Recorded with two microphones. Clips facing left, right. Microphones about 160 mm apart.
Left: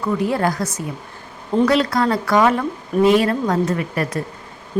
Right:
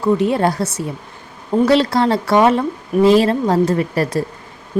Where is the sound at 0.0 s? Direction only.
25° right (ahead or behind).